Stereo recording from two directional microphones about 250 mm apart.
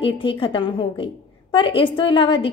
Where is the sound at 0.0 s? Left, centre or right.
Left.